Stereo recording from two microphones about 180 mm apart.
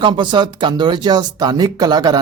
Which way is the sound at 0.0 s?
25° right (ahead or behind).